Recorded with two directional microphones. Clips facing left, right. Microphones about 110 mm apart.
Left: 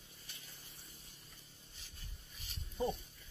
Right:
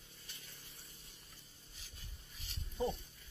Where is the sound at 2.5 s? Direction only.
Centre (ahead or behind).